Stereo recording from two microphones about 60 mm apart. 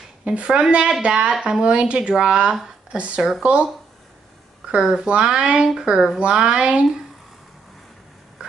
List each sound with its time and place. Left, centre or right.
0.2 s a woman's voice: centre
4.6 s speech: centre